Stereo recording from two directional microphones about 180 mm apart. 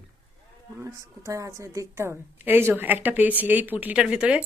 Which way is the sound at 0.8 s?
20° right (ahead or behind).